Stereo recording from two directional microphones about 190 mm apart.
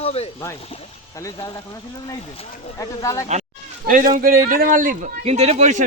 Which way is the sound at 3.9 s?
45° right (ahead or behind).